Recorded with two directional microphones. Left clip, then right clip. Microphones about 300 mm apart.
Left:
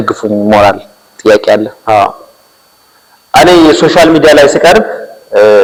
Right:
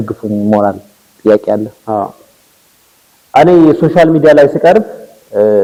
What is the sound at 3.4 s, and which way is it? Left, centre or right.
Speech, left.